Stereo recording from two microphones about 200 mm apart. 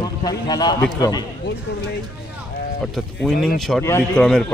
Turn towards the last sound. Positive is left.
turn(degrees=5)  # may be behind; listen again after turning